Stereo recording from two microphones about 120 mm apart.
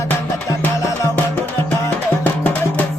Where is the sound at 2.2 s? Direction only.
15° left (ahead or behind).